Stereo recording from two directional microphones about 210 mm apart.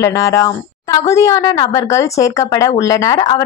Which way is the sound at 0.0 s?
15° left (ahead or behind).